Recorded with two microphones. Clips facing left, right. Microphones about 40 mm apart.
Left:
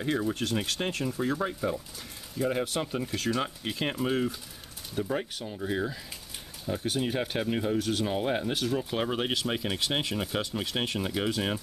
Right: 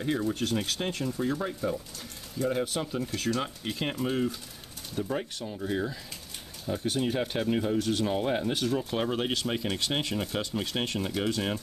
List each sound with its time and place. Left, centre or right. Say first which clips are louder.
0.0 s speech: even; centre
0.3 s speech: right 1 dB; left
0.6 s speech: even; centre